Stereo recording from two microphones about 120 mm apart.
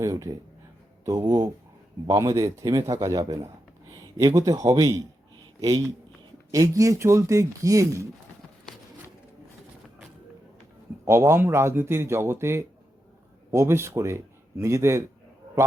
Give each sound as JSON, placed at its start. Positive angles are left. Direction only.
{"t": 0.0, "sound": "a man's voice", "side_deg": -25}
{"t": 11.0, "sound": "a man's voice", "side_deg": -25}